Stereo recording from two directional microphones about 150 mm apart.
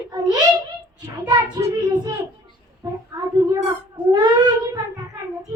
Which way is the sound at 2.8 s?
20° right (ahead or behind).